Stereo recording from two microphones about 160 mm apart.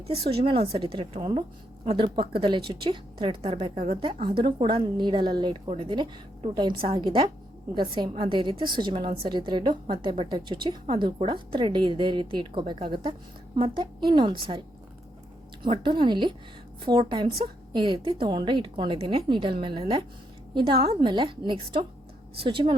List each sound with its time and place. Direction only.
0.1 s a woman's voice: 35° right (ahead or behind)
15.6 s a woman's voice: 30° right (ahead or behind)